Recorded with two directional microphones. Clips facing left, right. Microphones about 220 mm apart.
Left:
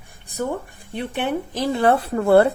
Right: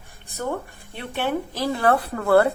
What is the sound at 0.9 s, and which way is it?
Speech, 20° left (ahead or behind).